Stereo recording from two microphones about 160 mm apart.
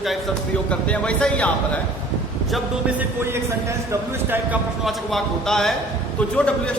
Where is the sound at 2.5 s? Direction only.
10° right (ahead or behind).